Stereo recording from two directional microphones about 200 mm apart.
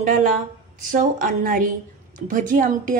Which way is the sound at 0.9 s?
40° right (ahead or behind).